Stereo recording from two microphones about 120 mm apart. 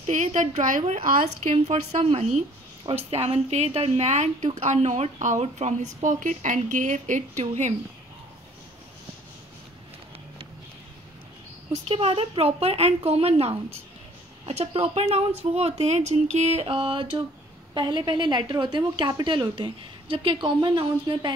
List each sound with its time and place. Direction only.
0.0 s a woman's voice: 70° right (ahead or behind)
11.9 s speech: 55° right (ahead or behind)